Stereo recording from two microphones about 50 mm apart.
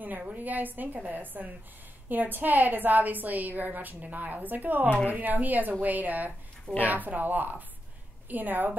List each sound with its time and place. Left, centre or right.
0.2 s a woman's voice: right